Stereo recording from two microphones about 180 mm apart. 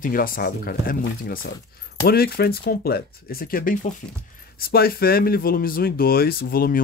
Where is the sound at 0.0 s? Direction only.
50° left (ahead or behind).